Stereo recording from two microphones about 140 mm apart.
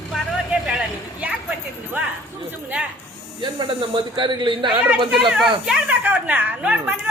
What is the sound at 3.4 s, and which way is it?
Speech, 35° right (ahead or behind).